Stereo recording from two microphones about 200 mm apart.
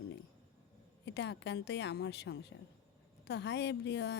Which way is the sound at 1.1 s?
60° left (ahead or behind).